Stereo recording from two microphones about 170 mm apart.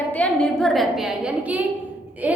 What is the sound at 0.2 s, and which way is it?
Speech, 5° left (ahead or behind).